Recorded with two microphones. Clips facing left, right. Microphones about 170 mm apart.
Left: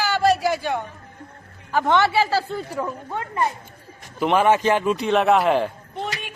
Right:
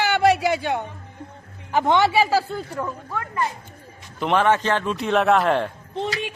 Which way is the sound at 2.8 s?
25° left (ahead or behind).